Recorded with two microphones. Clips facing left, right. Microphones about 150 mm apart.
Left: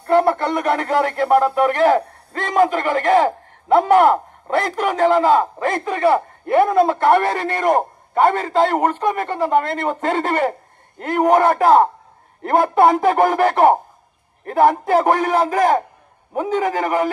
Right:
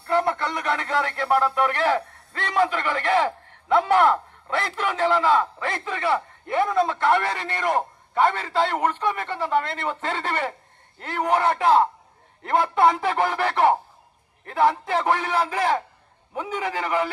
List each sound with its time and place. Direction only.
0.0 s speech: 55° left (ahead or behind)